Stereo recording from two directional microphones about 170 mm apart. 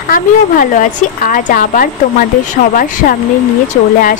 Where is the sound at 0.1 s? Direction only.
55° left (ahead or behind).